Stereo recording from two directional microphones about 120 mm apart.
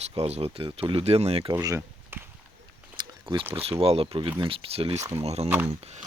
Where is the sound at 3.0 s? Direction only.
45° right (ahead or behind).